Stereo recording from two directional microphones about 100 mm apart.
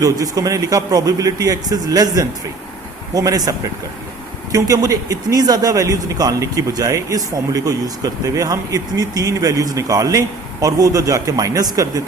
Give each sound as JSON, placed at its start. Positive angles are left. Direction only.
{"t": 0.0, "sound": "speech", "side_deg": -35}
{"t": 4.5, "sound": "speech", "side_deg": -35}